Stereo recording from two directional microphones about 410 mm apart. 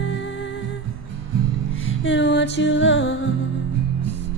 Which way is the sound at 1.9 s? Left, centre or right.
Left.